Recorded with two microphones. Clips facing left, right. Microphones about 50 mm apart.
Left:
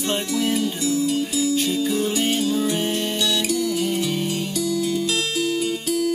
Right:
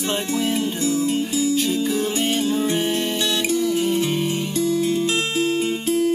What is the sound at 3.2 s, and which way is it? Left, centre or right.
Music, right.